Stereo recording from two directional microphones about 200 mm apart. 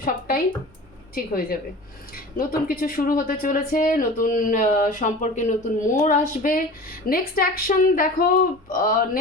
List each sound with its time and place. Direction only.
0.0 s speech: 45° left (ahead or behind)